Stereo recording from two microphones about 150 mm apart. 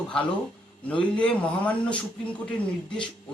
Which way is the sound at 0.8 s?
10° left (ahead or behind).